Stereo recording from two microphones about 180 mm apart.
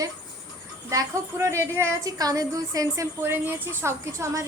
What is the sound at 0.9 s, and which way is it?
A woman's voice, 15° right (ahead or behind).